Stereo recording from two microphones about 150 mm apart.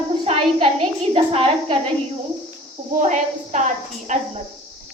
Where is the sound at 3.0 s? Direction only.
55° right (ahead or behind).